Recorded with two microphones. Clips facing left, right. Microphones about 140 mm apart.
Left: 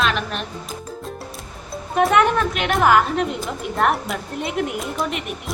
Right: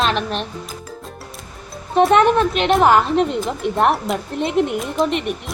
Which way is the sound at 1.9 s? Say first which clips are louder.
Right 4 dB; 25° right (ahead or behind).